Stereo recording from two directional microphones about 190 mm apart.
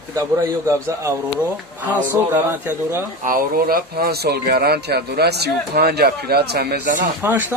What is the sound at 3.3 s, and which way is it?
Speech, 50° right (ahead or behind).